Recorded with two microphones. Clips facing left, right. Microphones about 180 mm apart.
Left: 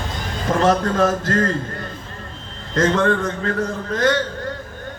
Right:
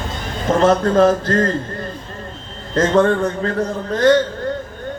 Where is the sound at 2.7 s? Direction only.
35° right (ahead or behind).